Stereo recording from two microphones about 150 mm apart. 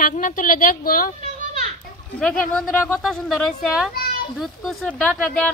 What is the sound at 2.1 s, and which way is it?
Speech, 5° left (ahead or behind).